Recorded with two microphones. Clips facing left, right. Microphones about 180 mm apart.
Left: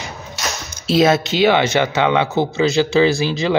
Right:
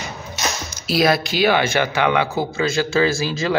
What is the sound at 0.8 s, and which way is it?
Speech, 25° left (ahead or behind).